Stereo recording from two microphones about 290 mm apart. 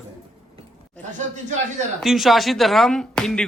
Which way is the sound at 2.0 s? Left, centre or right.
Centre.